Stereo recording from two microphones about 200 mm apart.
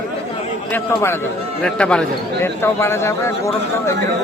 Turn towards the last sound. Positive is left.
turn(degrees=15)  # may be behind; listen again after turning